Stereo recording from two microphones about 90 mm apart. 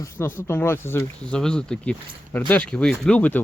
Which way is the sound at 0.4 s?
25° left (ahead or behind).